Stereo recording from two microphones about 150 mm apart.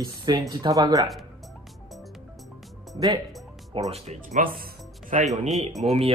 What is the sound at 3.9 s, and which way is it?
Speech, 50° right (ahead or behind).